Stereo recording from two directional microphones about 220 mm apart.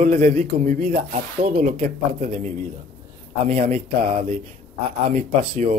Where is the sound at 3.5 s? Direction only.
35° right (ahead or behind).